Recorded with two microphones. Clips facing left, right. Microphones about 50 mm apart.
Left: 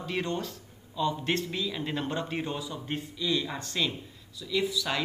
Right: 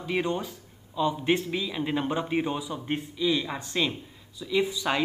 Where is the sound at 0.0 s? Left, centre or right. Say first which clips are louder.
Right 3 dB; centre.